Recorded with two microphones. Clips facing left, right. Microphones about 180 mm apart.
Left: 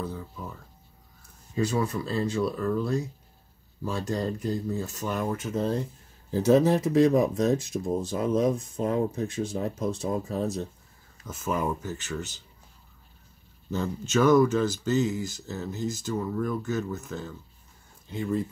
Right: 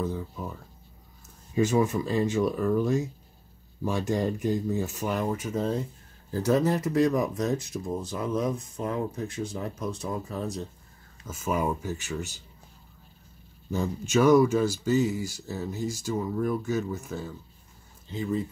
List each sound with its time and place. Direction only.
1.5 s speech: 15° right (ahead or behind)
4.1 s speech: 15° right (ahead or behind)
6.3 s speech: 20° left (ahead or behind)
11.2 s speech: 10° right (ahead or behind)
13.7 s speech: 10° right (ahead or behind)